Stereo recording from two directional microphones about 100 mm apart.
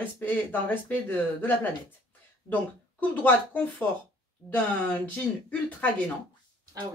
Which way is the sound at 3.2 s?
15° left (ahead or behind).